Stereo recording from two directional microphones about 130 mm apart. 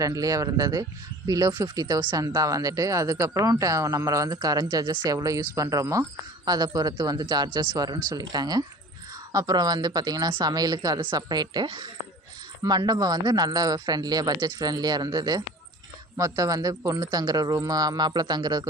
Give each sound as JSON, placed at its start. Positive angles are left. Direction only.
{"t": 0.0, "sound": "speech", "side_deg": -25}